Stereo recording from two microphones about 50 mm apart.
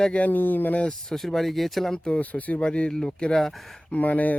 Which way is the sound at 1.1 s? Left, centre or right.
Centre.